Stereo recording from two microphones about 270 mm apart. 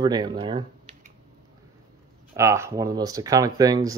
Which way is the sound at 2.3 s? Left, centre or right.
Centre.